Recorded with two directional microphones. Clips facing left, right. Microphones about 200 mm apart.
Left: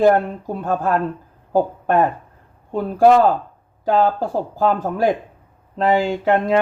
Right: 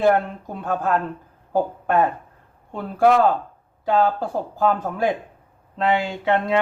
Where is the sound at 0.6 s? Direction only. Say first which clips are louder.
Left 2 dB; 35° left (ahead or behind).